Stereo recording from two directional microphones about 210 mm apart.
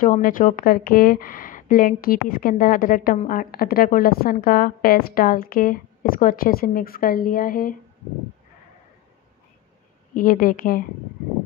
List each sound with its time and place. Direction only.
0.0 s speech: 40° left (ahead or behind)
10.1 s speech: 40° left (ahead or behind)